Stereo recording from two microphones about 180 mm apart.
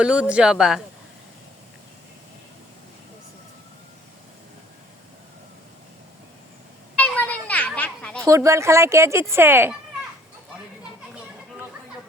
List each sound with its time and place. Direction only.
0.0 s speech: 5° right (ahead or behind)
7.0 s a sound: 10° left (ahead or behind)
8.2 s speech: 15° right (ahead or behind)